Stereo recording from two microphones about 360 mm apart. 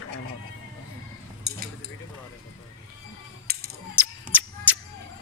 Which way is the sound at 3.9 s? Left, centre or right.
Centre.